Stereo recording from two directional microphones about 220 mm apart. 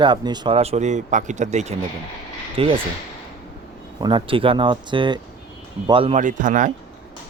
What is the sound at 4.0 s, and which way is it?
Speech, 20° right (ahead or behind).